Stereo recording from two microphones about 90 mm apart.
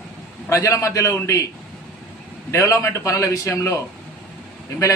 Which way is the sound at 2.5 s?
35° left (ahead or behind).